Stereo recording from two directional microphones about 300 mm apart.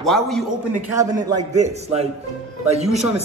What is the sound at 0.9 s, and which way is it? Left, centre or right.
A man's voice, centre.